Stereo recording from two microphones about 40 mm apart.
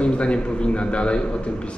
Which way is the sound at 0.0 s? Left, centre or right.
Left.